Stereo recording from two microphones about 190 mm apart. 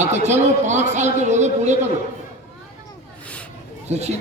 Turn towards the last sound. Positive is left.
turn(degrees=-35)  # may be behind; listen again after turning